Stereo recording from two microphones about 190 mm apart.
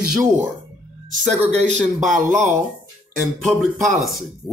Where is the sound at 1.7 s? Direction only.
40° right (ahead or behind).